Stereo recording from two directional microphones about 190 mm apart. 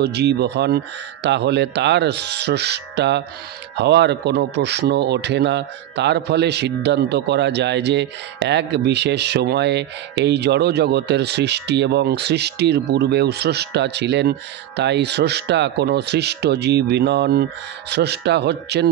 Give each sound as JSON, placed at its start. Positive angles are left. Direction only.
{"t": 0.0, "sound": "a man's voice", "side_deg": -60}